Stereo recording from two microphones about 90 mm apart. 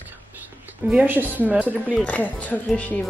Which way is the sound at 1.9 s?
15° left (ahead or behind).